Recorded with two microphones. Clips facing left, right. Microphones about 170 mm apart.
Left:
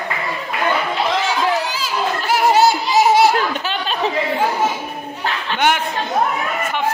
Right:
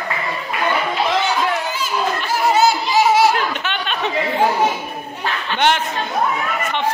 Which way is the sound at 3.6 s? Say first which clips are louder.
Left 2 dB; 35° left (ahead or behind).